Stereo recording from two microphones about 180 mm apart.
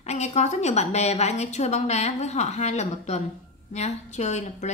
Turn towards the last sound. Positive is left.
turn(degrees=40)  # may be behind; listen again after turning